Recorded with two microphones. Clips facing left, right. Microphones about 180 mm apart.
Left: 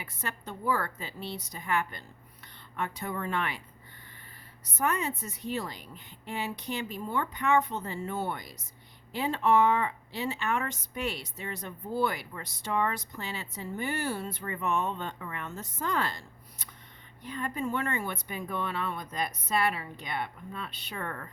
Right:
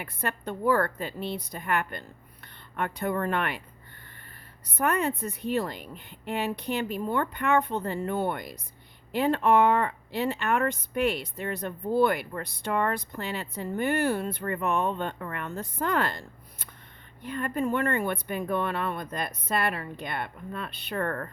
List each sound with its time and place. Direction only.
0.0 s speech: 60° right (ahead or behind)
4.8 s speech: 60° right (ahead or behind)